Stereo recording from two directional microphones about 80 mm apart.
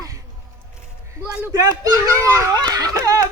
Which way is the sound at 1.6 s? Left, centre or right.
Right.